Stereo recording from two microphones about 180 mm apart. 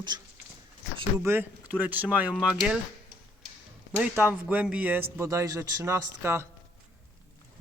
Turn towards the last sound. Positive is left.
turn(degrees=-15)  # may be behind; listen again after turning